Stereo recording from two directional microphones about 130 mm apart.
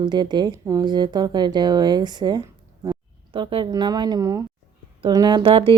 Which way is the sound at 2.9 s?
40° right (ahead or behind).